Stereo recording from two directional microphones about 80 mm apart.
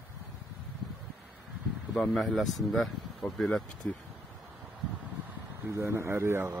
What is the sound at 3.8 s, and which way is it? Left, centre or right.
Speech, centre.